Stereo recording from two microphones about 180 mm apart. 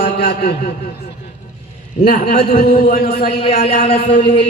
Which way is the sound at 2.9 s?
55° left (ahead or behind).